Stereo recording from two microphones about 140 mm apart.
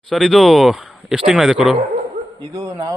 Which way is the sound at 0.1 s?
Centre (ahead or behind).